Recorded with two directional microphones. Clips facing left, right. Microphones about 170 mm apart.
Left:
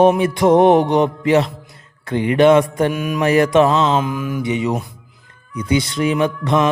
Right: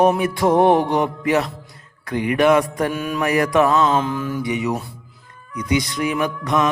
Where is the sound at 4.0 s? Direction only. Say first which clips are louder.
Left 1 dB; 15° left (ahead or behind).